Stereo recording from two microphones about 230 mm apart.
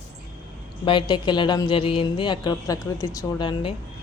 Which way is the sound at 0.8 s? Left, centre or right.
Left.